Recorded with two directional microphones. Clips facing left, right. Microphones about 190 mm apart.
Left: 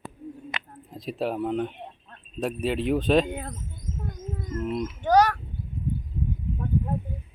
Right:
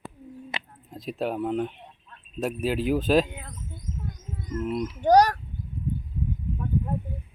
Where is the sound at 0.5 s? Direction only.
25° right (ahead or behind).